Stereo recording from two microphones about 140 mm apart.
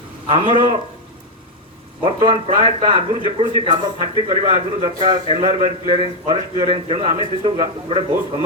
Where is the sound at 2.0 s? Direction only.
35° right (ahead or behind).